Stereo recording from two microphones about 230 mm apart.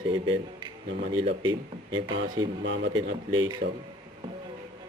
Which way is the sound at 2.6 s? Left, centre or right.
Right.